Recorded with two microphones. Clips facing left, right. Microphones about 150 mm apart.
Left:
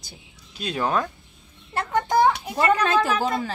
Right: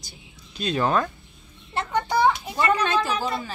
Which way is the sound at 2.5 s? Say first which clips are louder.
Left 2 dB; 80° left.